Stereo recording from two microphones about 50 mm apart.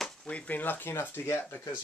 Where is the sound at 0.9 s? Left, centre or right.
Left.